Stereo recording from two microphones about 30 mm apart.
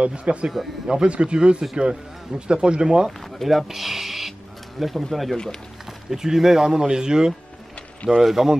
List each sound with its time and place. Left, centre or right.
0.0 s speech: right
3.1 s speech: centre
5.9 s speech: centre